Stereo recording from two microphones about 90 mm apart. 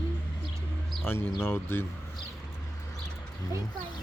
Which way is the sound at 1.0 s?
25° left (ahead or behind).